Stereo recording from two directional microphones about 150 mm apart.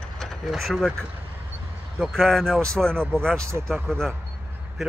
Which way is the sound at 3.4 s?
20° right (ahead or behind).